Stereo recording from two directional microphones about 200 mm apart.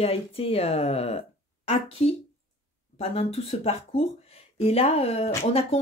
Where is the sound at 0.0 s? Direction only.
30° left (ahead or behind).